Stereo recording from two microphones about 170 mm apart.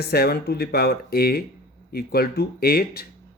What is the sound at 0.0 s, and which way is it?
Speech, 65° left (ahead or behind).